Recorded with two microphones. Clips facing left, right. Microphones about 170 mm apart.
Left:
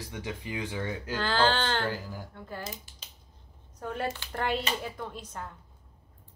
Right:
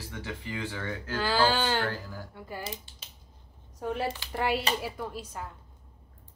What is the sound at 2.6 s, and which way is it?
Speech, 30° right (ahead or behind).